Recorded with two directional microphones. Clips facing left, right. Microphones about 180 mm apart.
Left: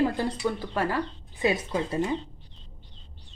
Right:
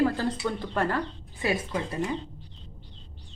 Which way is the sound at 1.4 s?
20° left (ahead or behind).